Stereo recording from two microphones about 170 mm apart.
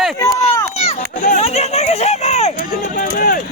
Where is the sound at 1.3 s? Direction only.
40° left (ahead or behind).